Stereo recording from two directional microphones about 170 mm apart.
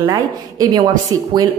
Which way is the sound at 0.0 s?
20° right (ahead or behind).